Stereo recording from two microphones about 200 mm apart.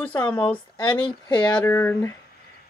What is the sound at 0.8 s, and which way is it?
Speech, 20° left (ahead or behind).